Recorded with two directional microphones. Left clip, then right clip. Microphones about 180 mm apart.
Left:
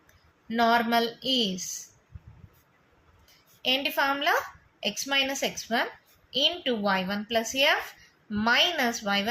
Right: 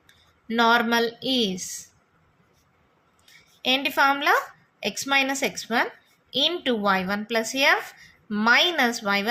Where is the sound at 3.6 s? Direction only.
40° right (ahead or behind).